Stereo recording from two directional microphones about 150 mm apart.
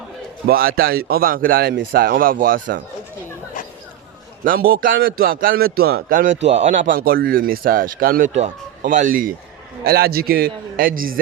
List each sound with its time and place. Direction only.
0.4 s a man's voice: 80° right
4.4 s a man's voice: 75° right (ahead or behind)
8.3 s a man's voice: 45° right (ahead or behind)
8.8 s a man's voice: 60° right (ahead or behind)
9.8 s a man's voice: 90° right; by 11.2 s 70° right (ahead or behind)